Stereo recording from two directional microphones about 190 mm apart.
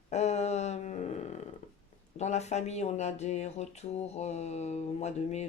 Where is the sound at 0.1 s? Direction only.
35° left (ahead or behind).